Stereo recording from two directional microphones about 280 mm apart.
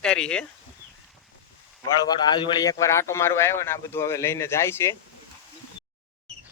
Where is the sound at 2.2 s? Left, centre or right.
Centre.